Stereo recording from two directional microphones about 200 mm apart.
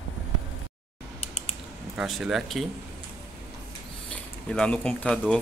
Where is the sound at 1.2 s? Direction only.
30° left (ahead or behind).